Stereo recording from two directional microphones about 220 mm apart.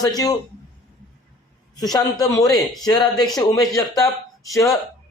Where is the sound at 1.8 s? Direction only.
15° left (ahead or behind).